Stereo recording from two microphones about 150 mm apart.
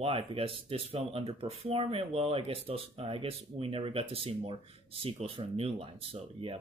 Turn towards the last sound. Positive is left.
turn(degrees=-35)  # may be behind; listen again after turning